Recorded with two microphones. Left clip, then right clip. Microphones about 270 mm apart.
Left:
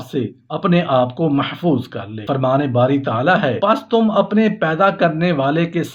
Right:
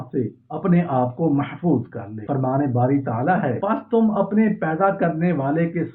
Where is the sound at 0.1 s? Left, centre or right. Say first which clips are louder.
Left 3 dB; left.